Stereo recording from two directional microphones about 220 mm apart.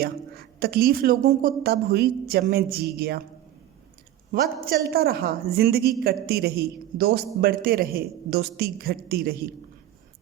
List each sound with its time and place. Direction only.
0.0 s speech: 45° right (ahead or behind)
4.3 s a woman's voice: 40° right (ahead or behind)